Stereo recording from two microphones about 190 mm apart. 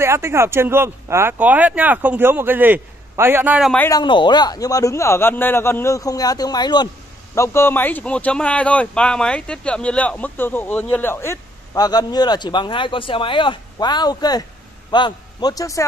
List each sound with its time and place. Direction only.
0.0 s speech: 15° right (ahead or behind)
3.7 s speech: 10° left (ahead or behind)
4.0 s a man's voice: 25° left (ahead or behind)